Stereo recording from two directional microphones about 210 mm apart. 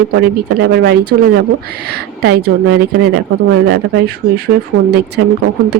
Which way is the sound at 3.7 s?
50° right (ahead or behind).